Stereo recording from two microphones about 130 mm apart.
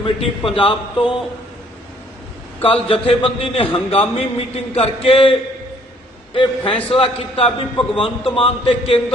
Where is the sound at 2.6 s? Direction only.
45° left (ahead or behind).